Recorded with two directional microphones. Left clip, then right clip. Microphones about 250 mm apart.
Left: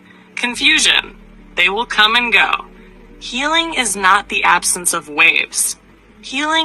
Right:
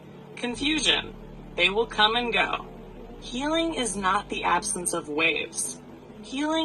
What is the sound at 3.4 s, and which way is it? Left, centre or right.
Speech, left.